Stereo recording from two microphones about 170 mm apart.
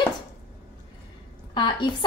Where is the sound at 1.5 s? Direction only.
25° left (ahead or behind).